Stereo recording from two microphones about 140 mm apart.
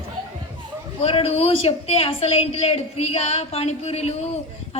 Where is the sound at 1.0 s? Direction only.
45° left (ahead or behind).